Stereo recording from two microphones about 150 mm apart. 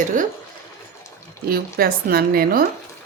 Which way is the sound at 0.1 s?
60° right (ahead or behind).